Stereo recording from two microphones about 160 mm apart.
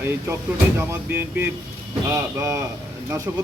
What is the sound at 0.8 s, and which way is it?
A man's voice, 15° right (ahead or behind).